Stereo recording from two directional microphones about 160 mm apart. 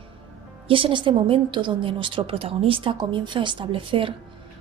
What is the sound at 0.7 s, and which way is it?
A woman's voice, 35° right (ahead or behind).